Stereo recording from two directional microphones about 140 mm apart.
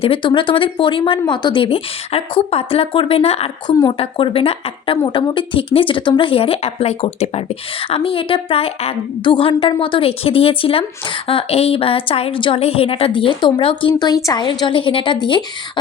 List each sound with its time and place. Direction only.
0.0 s a woman's voice: 40° left (ahead or behind)